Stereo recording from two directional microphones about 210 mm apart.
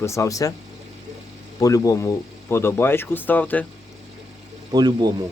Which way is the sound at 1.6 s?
15° left (ahead or behind).